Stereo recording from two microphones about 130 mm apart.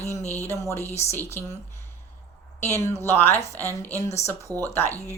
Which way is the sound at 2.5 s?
20° left (ahead or behind).